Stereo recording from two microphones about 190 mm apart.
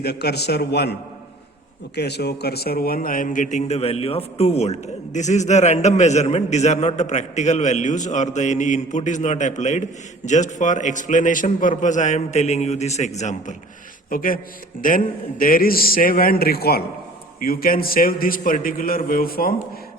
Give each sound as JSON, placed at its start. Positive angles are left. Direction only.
{"t": 0.0, "sound": "a man's voice", "side_deg": 60}
{"t": 2.0, "sound": "a man's voice", "side_deg": 60}